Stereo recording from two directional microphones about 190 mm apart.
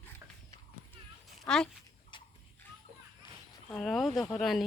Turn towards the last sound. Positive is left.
turn(degrees=0)  # may be behind; listen again after turning